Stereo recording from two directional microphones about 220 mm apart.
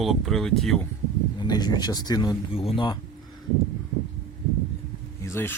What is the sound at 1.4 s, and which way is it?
Speech, 20° left (ahead or behind).